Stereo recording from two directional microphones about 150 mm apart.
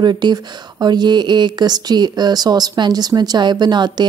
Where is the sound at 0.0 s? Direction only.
30° right (ahead or behind).